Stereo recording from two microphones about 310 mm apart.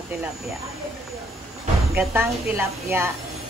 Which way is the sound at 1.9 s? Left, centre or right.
Centre.